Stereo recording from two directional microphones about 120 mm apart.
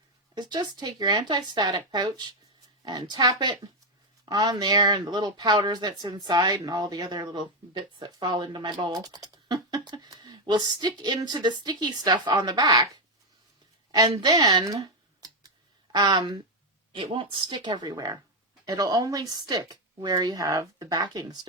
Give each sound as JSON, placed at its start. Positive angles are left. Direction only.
{"t": 0.3, "sound": "speech", "side_deg": -35}
{"t": 13.9, "sound": "a sound", "side_deg": -35}
{"t": 16.9, "sound": "speech", "side_deg": -45}